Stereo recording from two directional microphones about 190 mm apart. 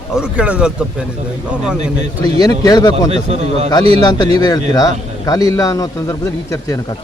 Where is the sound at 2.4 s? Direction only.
20° left (ahead or behind).